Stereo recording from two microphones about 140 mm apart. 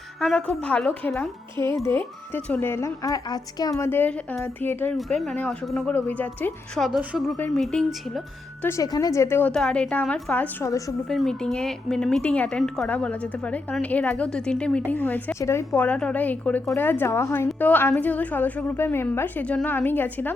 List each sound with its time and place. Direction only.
0.2 s a woman's voice: 5° left (ahead or behind)
4.9 s a woman's voice: centre (ahead or behind)
6.8 s a woman's voice: 5° right (ahead or behind)
7.5 s a woman's voice: 5° left (ahead or behind)
8.6 s speech: 25° left (ahead or behind)
9.5 s a woman's voice: 5° left (ahead or behind)
10.7 s speech: 25° left (ahead or behind)
11.1 s a woman's voice: 5° left (ahead or behind)